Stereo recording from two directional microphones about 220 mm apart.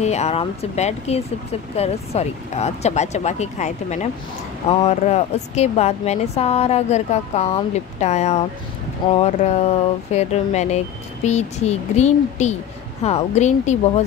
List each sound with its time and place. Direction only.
0.0 s a woman's voice: 30° left (ahead or behind)